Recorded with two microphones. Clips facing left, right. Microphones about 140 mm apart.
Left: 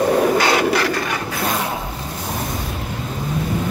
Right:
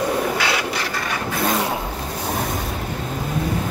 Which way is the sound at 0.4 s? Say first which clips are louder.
Left 6 dB; 40° left (ahead or behind).